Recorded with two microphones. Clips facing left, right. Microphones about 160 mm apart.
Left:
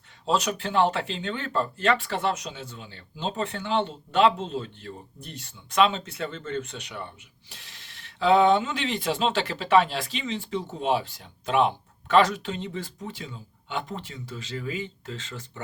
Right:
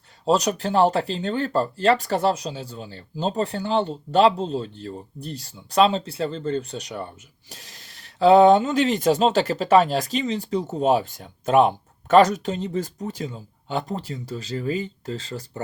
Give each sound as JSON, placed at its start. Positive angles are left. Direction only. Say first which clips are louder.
{"t": 0.3, "sound": "speech", "louder": "right 5 dB", "side_deg": -40}